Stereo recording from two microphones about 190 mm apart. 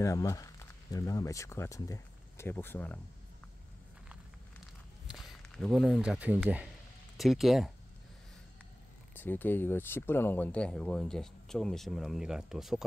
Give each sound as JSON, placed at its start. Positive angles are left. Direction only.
{"t": 0.0, "sound": "speech", "side_deg": 15}
{"t": 5.0, "sound": "speech", "side_deg": 0}
{"t": 9.1, "sound": "speech", "side_deg": 10}